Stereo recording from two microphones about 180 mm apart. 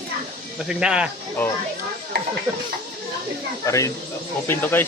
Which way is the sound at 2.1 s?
65° right (ahead or behind).